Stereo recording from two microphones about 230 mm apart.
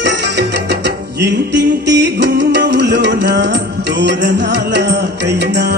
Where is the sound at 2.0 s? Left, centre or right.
Right.